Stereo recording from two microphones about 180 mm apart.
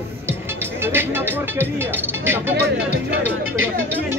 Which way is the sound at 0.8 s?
10° right (ahead or behind).